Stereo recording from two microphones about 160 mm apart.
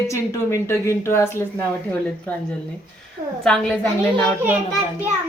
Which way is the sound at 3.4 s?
5° left (ahead or behind).